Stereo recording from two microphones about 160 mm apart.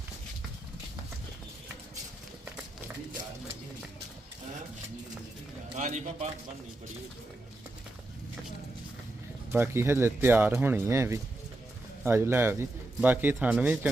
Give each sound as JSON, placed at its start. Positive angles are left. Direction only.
{"t": 5.7, "sound": "a man's voice", "side_deg": -50}
{"t": 9.5, "sound": "speech", "side_deg": -15}